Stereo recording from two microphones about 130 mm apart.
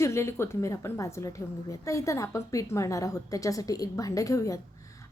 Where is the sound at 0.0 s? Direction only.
20° left (ahead or behind).